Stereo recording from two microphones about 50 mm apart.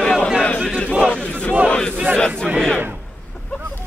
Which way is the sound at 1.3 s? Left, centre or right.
Left.